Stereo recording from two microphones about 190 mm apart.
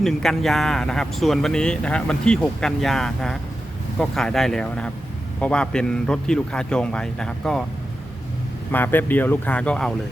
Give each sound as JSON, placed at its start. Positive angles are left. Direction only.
{"t": 0.0, "sound": "speech", "side_deg": 0}
{"t": 8.7, "sound": "speech", "side_deg": 10}